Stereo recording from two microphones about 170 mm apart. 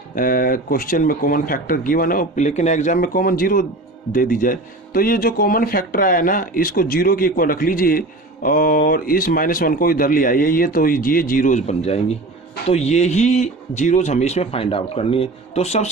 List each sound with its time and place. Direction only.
0.2 s speech: 55° left (ahead or behind); by 15.9 s 40° left (ahead or behind)